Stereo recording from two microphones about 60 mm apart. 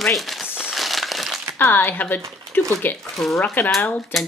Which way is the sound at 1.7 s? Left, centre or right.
Left.